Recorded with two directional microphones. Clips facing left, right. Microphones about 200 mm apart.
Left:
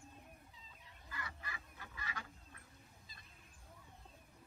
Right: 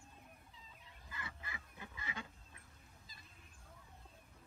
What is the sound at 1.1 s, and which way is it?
Fowl, 20° right (ahead or behind).